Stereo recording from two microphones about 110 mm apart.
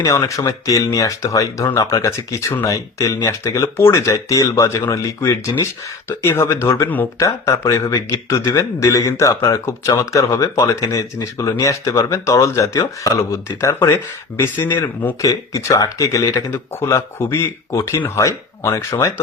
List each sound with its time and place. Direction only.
0.0 s a man's voice: 30° left (ahead or behind)